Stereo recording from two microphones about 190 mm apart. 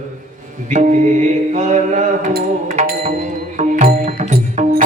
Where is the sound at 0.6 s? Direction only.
40° right (ahead or behind).